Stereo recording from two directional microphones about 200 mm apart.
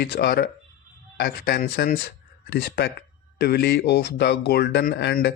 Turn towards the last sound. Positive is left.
turn(degrees=55)  # may be behind; listen again after turning